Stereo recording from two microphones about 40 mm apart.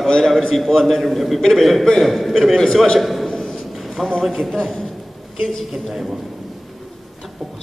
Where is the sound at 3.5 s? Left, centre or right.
Centre.